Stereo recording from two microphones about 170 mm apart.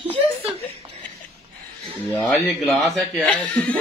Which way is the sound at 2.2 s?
5° left (ahead or behind).